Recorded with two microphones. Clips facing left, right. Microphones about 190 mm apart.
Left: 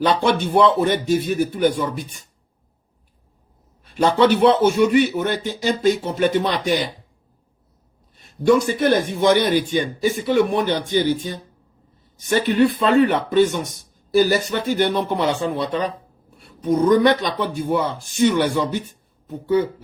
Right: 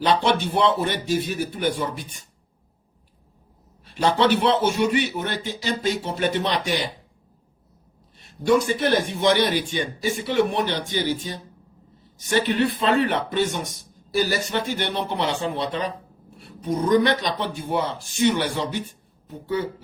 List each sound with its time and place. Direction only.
0.0 s a man's voice: 50° left (ahead or behind)
3.8 s a man's voice: 50° left (ahead or behind)
8.4 s a man's voice: 45° left (ahead or behind)
12.5 s a man's voice: 45° left (ahead or behind)